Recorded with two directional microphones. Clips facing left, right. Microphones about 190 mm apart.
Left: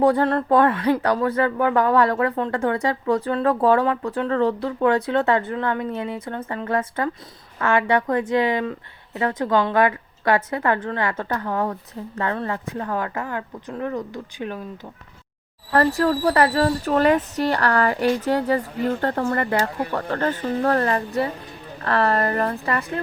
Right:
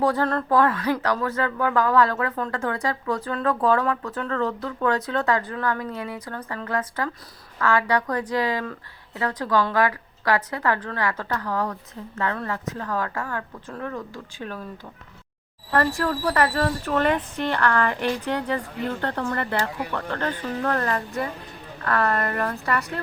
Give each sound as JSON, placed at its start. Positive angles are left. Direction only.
{"t": 0.0, "sound": "speech", "side_deg": 30}
{"t": 15.8, "sound": "speech", "side_deg": 35}